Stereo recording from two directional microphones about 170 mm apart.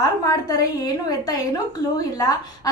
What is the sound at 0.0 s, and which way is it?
A woman's voice, 20° left (ahead or behind).